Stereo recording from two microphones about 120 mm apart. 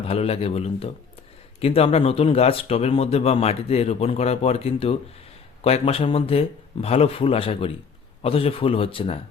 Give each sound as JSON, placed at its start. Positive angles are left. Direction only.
{"t": 0.1, "sound": "a man's voice", "side_deg": 55}